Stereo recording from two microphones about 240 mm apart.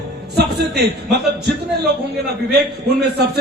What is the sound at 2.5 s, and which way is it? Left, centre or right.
Speech, right.